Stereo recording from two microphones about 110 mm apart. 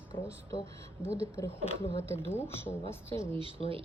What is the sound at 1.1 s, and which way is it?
Speech, 25° left (ahead or behind).